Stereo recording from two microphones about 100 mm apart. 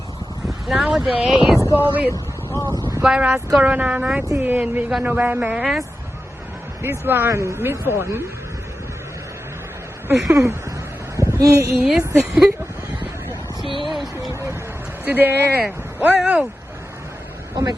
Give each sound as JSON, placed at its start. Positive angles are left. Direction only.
{"t": 0.7, "sound": "a woman's voice", "side_deg": -5}
{"t": 1.5, "sound": "speech", "side_deg": 25}
{"t": 1.8, "sound": "speech", "side_deg": -20}
{"t": 2.0, "sound": "a sound", "side_deg": 20}
{"t": 3.0, "sound": "speech", "side_deg": -10}
{"t": 6.8, "sound": "speech", "side_deg": -20}
{"t": 10.1, "sound": "speech", "side_deg": -30}
{"t": 11.2, "sound": "a sound", "side_deg": -35}
{"t": 11.9, "sound": "a woman's voice", "side_deg": 0}
{"t": 13.7, "sound": "a sound", "side_deg": 0}
{"t": 15.0, "sound": "speech", "side_deg": -20}